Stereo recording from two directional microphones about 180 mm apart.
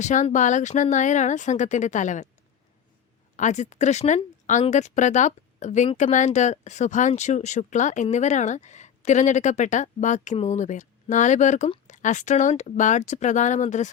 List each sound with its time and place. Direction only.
0.0 s speech: 40° left (ahead or behind)
3.3 s speech: 40° left (ahead or behind)